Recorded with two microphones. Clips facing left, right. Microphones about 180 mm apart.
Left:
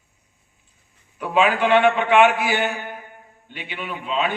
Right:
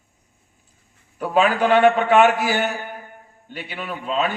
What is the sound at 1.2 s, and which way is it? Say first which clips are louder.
A man's voice: right 1 dB; 40° right (ahead or behind).